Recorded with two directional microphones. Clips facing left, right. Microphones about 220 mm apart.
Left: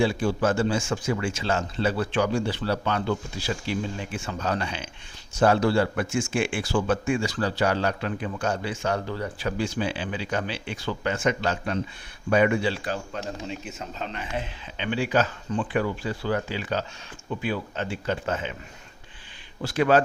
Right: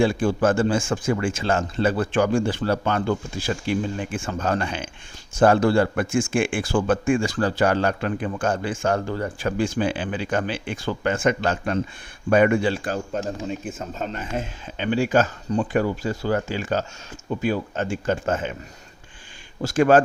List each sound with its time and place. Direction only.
0.0 s speech: 50° right (ahead or behind)
19.6 s speech: 45° right (ahead or behind)